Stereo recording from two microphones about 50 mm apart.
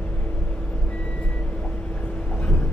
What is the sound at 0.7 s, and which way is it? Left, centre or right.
Vehicle, left.